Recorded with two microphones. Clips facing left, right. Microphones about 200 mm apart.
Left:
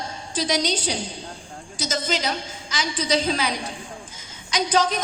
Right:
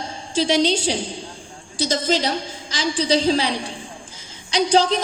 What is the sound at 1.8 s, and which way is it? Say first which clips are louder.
A woman's voice: right 5 dB; 35° right (ahead or behind).